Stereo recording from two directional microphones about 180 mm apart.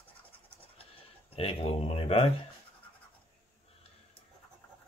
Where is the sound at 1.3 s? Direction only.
35° left (ahead or behind).